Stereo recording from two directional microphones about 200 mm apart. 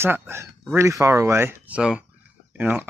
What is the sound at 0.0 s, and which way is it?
Speech, 10° right (ahead or behind).